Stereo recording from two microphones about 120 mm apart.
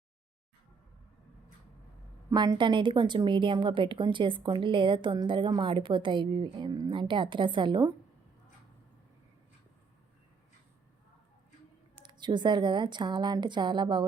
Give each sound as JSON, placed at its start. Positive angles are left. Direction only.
{"t": 2.3, "sound": "a woman's voice", "side_deg": -40}
{"t": 12.0, "sound": "a woman's voice", "side_deg": -40}